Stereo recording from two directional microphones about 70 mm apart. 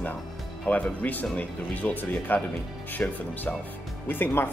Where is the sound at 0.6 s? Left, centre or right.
Left.